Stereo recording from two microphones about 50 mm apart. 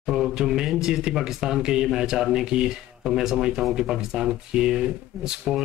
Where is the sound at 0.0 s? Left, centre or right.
Centre.